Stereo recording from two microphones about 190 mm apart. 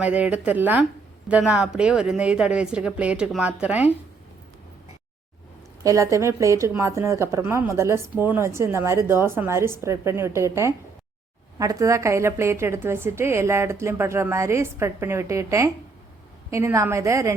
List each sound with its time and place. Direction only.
0.0 s a woman's voice: 5° right (ahead or behind)
5.8 s a woman's voice: 15° right (ahead or behind)